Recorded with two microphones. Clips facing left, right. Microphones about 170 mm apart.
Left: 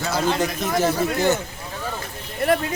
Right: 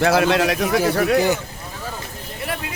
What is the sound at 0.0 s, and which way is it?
A man's voice, 70° right (ahead or behind).